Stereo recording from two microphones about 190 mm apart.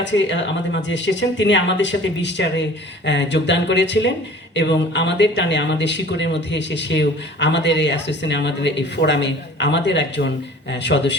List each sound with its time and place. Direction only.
0.8 s speech: 70° left (ahead or behind)